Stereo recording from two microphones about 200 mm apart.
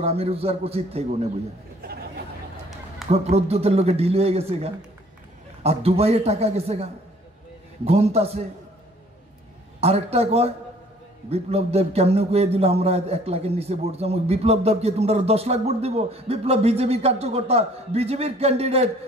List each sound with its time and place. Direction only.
0.0 s a man's voice: 30° right (ahead or behind)
3.1 s a man's voice: 30° right (ahead or behind)
9.8 s a man's voice: 30° right (ahead or behind)